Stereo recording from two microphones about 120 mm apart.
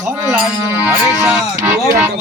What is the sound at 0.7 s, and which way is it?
A man's voice, 10° right (ahead or behind).